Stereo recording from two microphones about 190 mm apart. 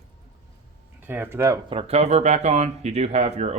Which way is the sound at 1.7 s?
30° right (ahead or behind).